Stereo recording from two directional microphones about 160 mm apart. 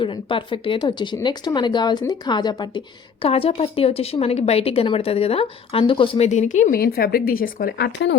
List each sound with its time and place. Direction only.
0.0 s speech: 30° left (ahead or behind); by 8.1 s 90° left